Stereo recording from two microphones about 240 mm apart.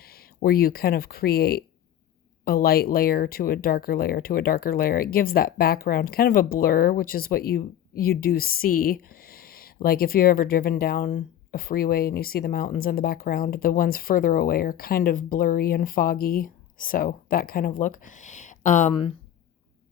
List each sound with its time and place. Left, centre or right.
0.0 s speech: left